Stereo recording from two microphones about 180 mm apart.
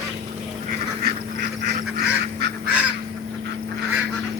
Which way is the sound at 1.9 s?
65° right (ahead or behind).